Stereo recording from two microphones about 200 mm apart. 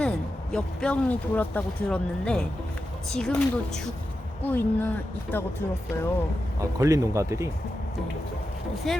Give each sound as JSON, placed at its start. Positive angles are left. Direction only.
{"t": 0.0, "sound": "speech", "side_deg": 5}
{"t": 6.7, "sound": "speech", "side_deg": -15}
{"t": 8.9, "sound": "speech", "side_deg": 0}